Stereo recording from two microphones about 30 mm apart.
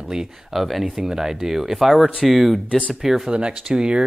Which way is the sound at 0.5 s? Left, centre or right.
Centre.